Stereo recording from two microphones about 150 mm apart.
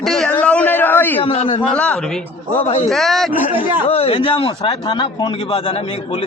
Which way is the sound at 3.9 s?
40° left (ahead or behind).